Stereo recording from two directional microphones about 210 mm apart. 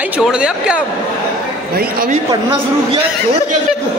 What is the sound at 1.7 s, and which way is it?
Speech, 45° right (ahead or behind).